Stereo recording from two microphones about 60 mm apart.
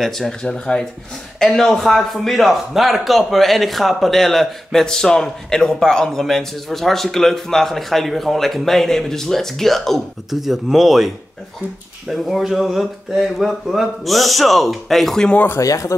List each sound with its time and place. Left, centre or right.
0.0 s a man's voice: centre
12.1 s a man's voice: centre
15.6 s speech: left